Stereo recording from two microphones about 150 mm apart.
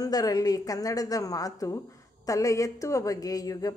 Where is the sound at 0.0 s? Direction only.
25° left (ahead or behind).